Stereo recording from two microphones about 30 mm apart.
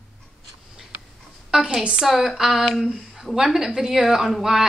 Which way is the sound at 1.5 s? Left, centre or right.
Right.